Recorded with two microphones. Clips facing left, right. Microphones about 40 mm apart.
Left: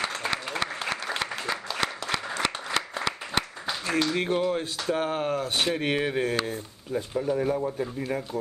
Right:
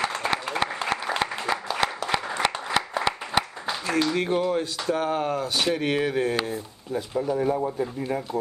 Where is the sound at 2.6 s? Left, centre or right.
Centre.